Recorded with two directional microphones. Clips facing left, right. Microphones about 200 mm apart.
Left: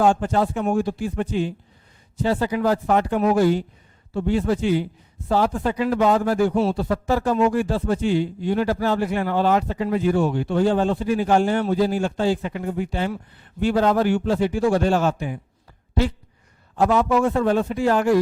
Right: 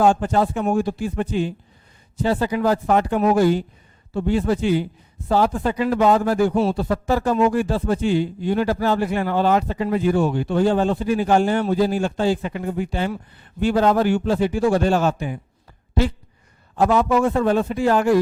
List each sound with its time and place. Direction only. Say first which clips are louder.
0.0 s speech: right 1 dB; 15° right (ahead or behind)
16.9 s a man's voice: right 1 dB; 35° right (ahead or behind)
17.3 s speech: right 1 dB; 15° right (ahead or behind)